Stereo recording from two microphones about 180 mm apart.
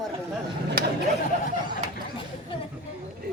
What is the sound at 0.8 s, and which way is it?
Chatter, 55° right (ahead or behind).